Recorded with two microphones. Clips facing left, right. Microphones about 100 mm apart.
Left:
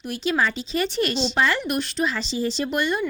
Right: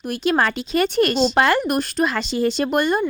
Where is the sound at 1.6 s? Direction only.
45° right (ahead or behind).